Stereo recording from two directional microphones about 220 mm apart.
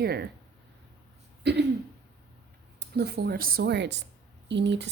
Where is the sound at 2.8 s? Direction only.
45° right (ahead or behind).